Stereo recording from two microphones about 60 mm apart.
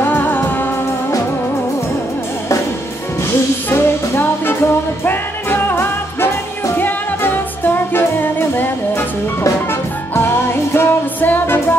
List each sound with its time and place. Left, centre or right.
0.0 s music: left
3.7 s music: left
10.1 s music: left